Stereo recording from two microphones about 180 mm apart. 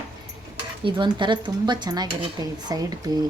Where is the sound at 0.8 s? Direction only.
25° right (ahead or behind).